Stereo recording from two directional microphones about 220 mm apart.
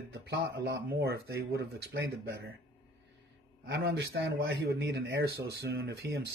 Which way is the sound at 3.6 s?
50° right (ahead or behind).